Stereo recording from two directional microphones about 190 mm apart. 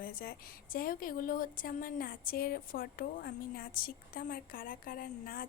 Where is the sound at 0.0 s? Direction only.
50° left (ahead or behind).